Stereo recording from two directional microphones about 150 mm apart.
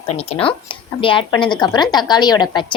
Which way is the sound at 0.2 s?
40° left (ahead or behind).